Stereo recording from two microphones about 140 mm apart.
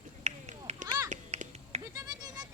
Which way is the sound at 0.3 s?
50° right (ahead or behind).